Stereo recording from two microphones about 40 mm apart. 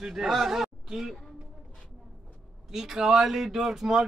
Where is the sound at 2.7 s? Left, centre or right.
Centre.